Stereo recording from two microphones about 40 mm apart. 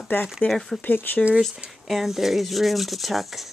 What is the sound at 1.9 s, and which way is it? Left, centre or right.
Speech, centre.